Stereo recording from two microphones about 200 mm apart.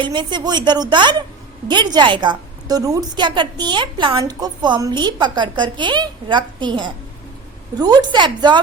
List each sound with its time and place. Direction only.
0.0 s a woman's voice: 25° right (ahead or behind)